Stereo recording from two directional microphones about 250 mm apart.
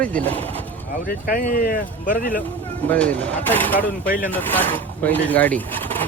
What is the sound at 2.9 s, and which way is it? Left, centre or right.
Speech, centre.